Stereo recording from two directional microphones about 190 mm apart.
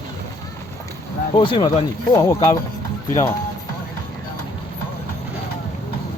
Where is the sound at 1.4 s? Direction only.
25° left (ahead or behind).